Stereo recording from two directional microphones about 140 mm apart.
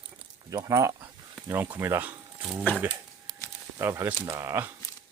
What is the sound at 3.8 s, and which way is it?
Speech, 15° right (ahead or behind).